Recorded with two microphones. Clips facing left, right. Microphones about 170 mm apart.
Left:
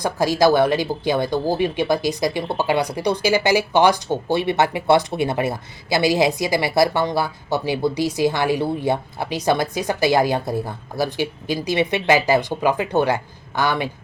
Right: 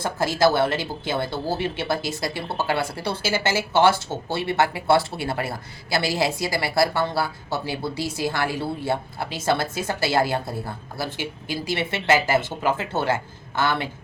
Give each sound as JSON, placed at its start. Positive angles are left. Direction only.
{"t": 0.0, "sound": "speech", "side_deg": 15}